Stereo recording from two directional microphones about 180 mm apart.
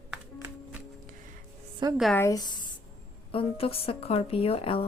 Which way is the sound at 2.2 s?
20° left (ahead or behind).